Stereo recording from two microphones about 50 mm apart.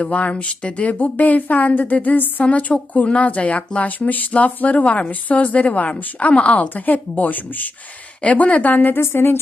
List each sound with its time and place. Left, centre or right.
0.0 s speech: left
9.0 s a woman's voice: left